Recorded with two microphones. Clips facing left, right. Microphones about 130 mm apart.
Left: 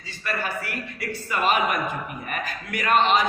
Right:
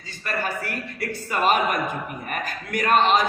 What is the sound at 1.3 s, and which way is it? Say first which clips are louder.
A man's voice: right 1 dB; 40° right (ahead or behind).